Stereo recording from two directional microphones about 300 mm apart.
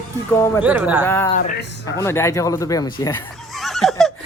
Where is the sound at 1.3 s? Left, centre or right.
Left.